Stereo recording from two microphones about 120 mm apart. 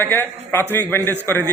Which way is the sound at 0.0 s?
15° left (ahead or behind).